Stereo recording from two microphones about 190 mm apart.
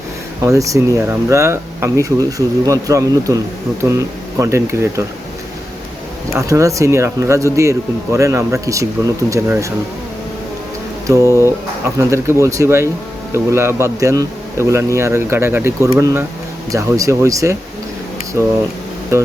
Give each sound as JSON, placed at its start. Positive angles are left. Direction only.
{"t": 0.4, "sound": "speech", "side_deg": -15}
{"t": 6.3, "sound": "speech", "side_deg": -15}
{"t": 11.0, "sound": "speech", "side_deg": -15}
{"t": 19.1, "sound": "speech", "side_deg": -15}